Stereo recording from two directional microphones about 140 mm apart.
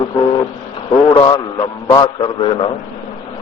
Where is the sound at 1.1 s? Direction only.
30° left (ahead or behind).